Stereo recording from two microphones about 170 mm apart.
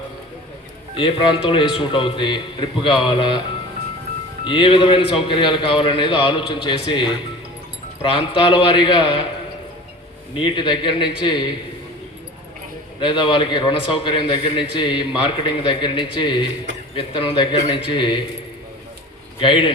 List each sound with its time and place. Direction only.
0.9 s a man's voice: 30° left (ahead or behind)
4.4 s a man's voice: 30° left (ahead or behind)
10.3 s a man's voice: 30° left (ahead or behind)
13.0 s a man's voice: 30° left (ahead or behind)
19.4 s a man's voice: 30° left (ahead or behind)